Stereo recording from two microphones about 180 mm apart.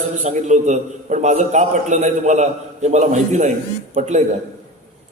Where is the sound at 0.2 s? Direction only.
40° right (ahead or behind).